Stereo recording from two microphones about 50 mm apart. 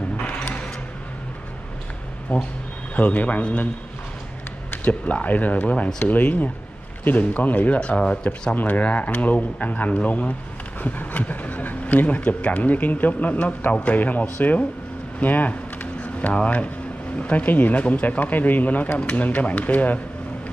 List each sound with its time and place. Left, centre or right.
0.2 s a sound: left
2.3 s speech: left
3.0 s speech: left
4.6 s speech: left
8.0 s speech: left
10.8 s a sound: left
12.3 s speech: left
15.1 s a sound: left
17.2 s speech: left